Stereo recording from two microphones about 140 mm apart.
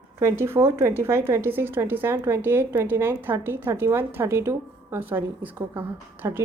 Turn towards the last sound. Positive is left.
turn(degrees=-15)  # may be behind; listen again after turning